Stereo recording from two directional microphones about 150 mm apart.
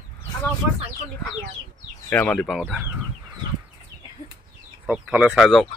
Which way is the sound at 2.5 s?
5° right (ahead or behind).